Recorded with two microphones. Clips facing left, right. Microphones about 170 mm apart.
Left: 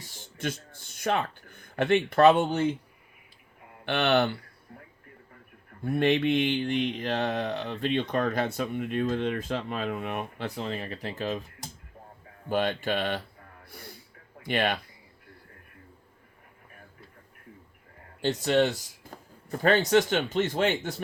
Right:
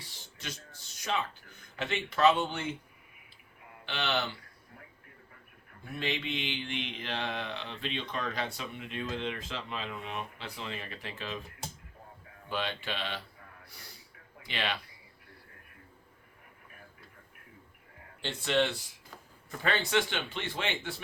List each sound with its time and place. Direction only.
0.0 s speech: 50° left (ahead or behind)
3.8 s speech: 55° left (ahead or behind)
5.8 s speech: 55° left (ahead or behind)
12.5 s speech: 45° left (ahead or behind)
13.7 s gasp: 50° left (ahead or behind)
14.4 s speech: 50° left (ahead or behind)
18.2 s speech: 40° left (ahead or behind)
19.1 s a sound: 50° left (ahead or behind)
19.5 s speech: 45° left (ahead or behind)